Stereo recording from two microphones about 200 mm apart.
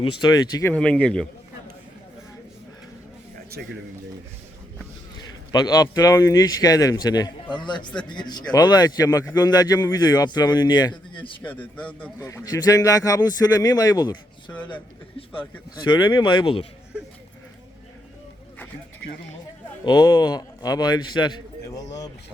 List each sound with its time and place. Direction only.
0.0 s a man's voice: 25° left (ahead or behind)
0.7 s speech: 5° left (ahead or behind)
5.5 s a man's voice: 20° left (ahead or behind)
11.4 s a man's voice: 10° left (ahead or behind)
14.5 s a man's voice: 5° left (ahead or behind)
15.8 s a man's voice: 20° left (ahead or behind)
19.8 s a man's voice: 20° left (ahead or behind)